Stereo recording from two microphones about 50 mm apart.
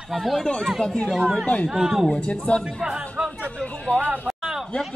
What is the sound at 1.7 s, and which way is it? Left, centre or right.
Speech, centre.